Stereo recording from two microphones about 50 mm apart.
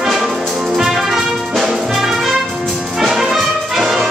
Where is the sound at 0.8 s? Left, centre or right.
Centre.